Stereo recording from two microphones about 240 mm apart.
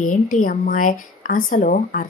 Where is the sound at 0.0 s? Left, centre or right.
Left.